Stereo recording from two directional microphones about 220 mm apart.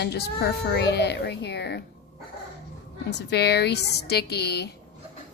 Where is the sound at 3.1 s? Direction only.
50° left (ahead or behind).